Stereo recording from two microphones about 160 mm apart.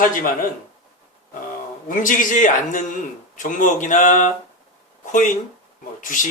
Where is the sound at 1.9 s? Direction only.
55° left (ahead or behind).